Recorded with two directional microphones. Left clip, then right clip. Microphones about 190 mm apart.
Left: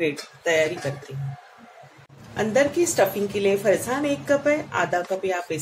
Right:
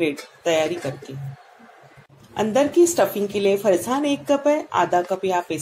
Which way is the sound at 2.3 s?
25° right (ahead or behind).